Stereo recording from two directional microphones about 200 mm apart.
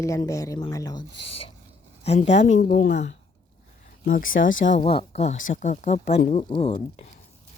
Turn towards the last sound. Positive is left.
turn(degrees=30)  # may be behind; listen again after turning